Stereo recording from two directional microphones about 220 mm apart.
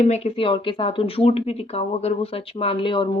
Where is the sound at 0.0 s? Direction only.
30° left (ahead or behind).